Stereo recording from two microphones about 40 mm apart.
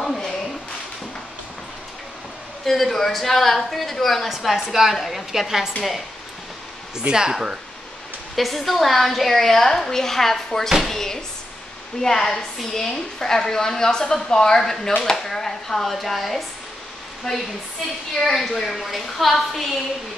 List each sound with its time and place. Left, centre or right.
2.6 s a woman's voice: centre
7.0 s speech: centre
8.4 s a woman's voice: centre
17.3 s a woman's voice: centre